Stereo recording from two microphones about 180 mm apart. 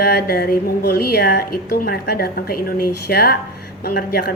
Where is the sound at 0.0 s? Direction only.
60° left (ahead or behind).